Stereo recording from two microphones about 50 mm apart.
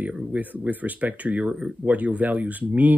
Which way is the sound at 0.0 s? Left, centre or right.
Right.